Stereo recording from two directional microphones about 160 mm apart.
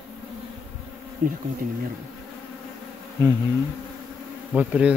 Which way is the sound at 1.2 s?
55° right (ahead or behind).